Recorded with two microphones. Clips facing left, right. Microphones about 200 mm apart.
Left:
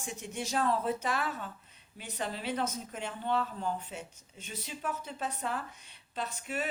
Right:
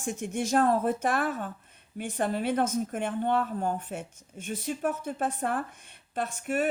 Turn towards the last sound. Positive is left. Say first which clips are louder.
# right 7 dB
turn(degrees=-50)  # may be behind; listen again after turning